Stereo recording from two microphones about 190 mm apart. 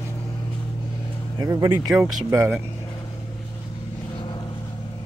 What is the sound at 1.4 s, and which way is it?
Speech, 20° right (ahead or behind).